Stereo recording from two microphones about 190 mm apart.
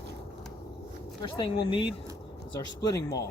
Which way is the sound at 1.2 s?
25° left (ahead or behind).